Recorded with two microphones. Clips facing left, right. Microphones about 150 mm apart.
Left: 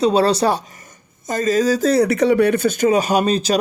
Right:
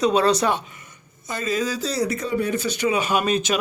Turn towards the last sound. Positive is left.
turn(degrees=35)  # may be behind; listen again after turning